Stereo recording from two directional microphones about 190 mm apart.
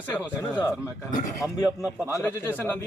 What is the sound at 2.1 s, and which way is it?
Speech, 15° left (ahead or behind).